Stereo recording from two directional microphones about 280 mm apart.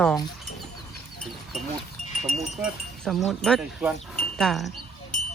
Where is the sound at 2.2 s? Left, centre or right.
Centre.